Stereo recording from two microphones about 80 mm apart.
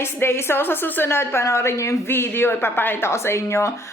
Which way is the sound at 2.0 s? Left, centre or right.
Left.